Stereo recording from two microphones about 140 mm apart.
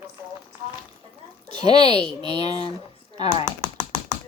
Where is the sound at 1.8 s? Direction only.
45° left (ahead or behind).